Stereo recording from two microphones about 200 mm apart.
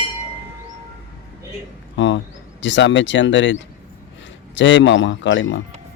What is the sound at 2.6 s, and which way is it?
Speech, 65° left (ahead or behind).